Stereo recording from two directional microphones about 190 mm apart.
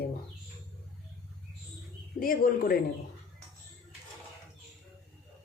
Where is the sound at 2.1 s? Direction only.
50° left (ahead or behind).